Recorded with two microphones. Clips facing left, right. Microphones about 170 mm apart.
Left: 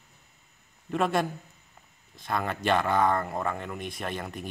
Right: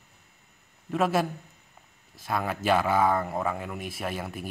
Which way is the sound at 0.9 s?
5° right (ahead or behind).